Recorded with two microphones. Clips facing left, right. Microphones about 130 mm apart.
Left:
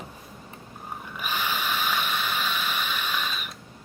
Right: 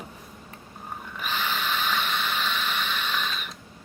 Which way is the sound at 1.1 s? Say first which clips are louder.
Even; 10° left (ahead or behind).